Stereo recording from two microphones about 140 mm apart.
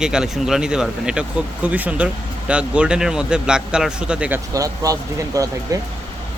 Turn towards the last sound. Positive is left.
turn(degrees=-25)  # may be behind; listen again after turning